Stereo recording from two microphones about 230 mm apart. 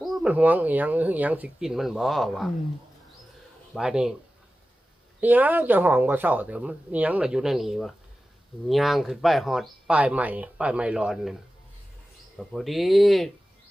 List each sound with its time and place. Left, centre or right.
0.0 s speech: centre
3.8 s speech: centre
5.2 s speech: centre
12.4 s speech: centre